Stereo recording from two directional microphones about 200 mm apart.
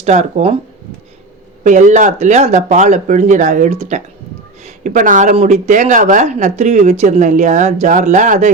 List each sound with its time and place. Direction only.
0.0 s speech: 35° right (ahead or behind)
1.6 s speech: 35° right (ahead or behind)